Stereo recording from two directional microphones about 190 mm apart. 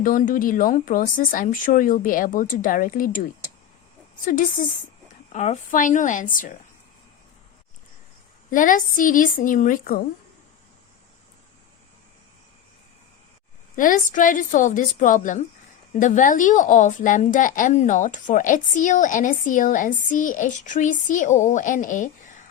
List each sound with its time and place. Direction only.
0.0 s a woman's voice: 45° left (ahead or behind)
5.3 s a woman's voice: 35° left (ahead or behind)
8.4 s a woman's voice: 45° left (ahead or behind)
13.7 s a woman's voice: 45° left (ahead or behind)